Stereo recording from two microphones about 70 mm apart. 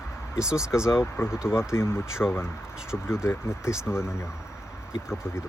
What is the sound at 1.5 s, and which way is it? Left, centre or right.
Speech, left.